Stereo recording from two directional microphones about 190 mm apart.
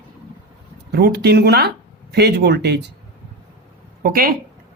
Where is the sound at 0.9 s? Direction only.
60° right (ahead or behind).